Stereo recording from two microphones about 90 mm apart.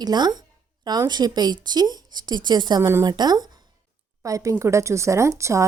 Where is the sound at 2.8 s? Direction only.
30° right (ahead or behind).